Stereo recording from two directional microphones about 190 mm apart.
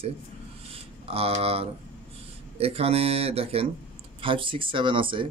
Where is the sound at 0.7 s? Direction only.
30° right (ahead or behind).